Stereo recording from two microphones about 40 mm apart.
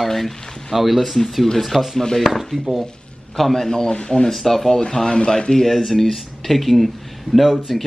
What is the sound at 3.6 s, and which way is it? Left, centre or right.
A man's voice, centre.